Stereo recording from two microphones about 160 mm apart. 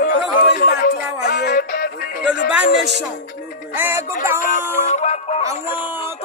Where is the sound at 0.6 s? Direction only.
65° left (ahead or behind).